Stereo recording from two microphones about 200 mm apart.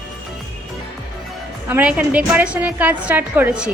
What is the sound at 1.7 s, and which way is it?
A woman's voice, 5° right (ahead or behind).